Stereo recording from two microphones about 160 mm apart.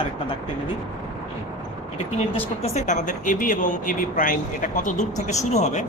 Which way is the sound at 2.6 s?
40° left (ahead or behind).